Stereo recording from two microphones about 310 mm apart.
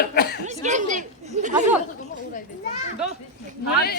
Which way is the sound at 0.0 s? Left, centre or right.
Left.